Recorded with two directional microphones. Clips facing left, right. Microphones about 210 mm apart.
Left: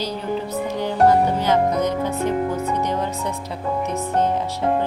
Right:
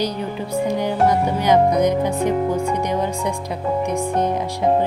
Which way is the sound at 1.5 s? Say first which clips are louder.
Right 4 dB; 15° right (ahead or behind).